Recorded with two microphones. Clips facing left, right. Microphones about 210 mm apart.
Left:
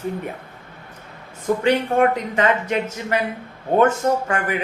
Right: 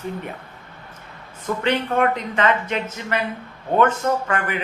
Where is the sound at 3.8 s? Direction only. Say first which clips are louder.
Left 2 dB; 40° left (ahead or behind).